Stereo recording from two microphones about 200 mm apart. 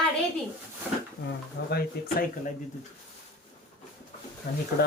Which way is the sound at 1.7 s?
50° left (ahead or behind).